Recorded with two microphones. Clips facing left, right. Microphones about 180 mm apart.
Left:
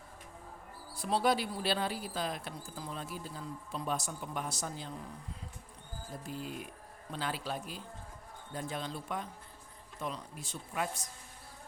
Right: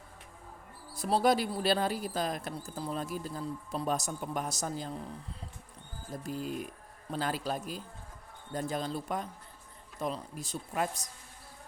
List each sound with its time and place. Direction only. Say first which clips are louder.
0.9 s speech: right 3 dB; 40° right (ahead or behind)
6.2 s speech: right 6 dB; 40° right (ahead or behind)